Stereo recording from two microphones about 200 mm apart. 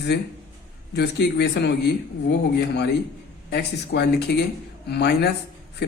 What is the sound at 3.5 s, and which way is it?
A woman's voice, 55° left (ahead or behind).